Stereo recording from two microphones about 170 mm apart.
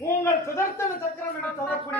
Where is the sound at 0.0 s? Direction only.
15° left (ahead or behind).